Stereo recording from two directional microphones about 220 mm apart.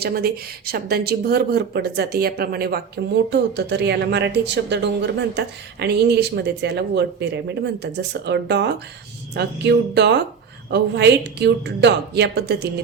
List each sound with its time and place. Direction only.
0.0 s speech: 45° right (ahead or behind)